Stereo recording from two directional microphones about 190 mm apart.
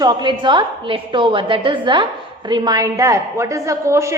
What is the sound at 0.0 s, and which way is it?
A woman's voice, 20° right (ahead or behind).